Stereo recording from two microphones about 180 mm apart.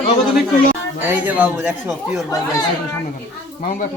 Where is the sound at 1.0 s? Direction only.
10° right (ahead or behind).